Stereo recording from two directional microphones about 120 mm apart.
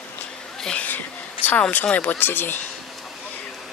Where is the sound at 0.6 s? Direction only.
5° left (ahead or behind).